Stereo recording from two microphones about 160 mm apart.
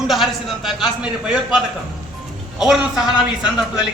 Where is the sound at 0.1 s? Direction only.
Centre (ahead or behind).